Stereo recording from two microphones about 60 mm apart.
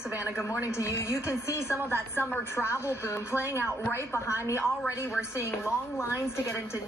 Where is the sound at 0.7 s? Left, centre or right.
Left.